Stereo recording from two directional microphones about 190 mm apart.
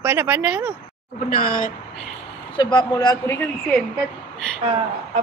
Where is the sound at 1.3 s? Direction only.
45° left (ahead or behind).